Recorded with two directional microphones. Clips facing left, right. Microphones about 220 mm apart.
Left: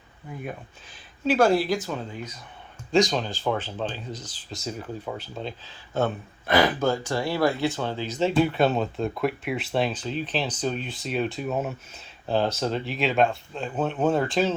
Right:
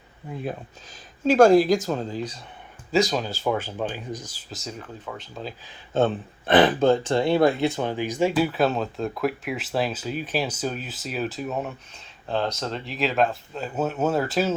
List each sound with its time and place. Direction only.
1.3 s speech: 45° right (ahead or behind)
2.9 s speech: 5° right (ahead or behind)
5.0 s speech: 10° left (ahead or behind)
5.9 s speech: 25° right (ahead or behind); by 14.5 s 5° right (ahead or behind)